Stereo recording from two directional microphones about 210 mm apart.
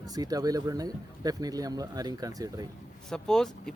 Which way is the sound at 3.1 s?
Centre (ahead or behind).